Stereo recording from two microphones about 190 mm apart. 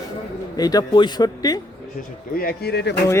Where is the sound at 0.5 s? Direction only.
20° left (ahead or behind).